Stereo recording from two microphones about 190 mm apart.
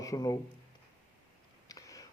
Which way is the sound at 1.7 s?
15° left (ahead or behind).